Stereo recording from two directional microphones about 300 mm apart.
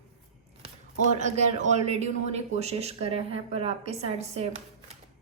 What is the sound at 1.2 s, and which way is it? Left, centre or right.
Speech, right.